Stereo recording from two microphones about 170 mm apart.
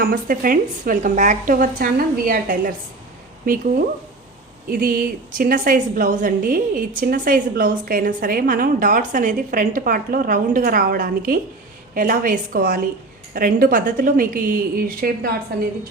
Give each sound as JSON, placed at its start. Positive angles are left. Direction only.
{"t": 0.0, "sound": "a woman's voice", "side_deg": -55}